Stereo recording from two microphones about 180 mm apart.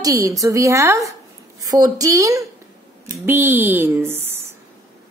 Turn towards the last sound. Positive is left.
turn(degrees=-10)  # may be behind; listen again after turning